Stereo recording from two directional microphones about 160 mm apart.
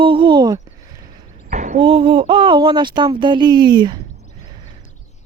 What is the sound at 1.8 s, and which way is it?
Speech, 35° right (ahead or behind).